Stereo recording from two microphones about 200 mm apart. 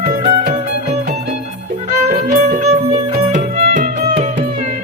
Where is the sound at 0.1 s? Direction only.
45° right (ahead or behind).